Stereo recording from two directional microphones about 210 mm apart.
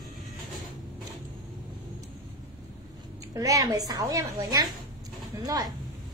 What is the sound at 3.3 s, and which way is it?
A woman's voice, 15° right (ahead or behind).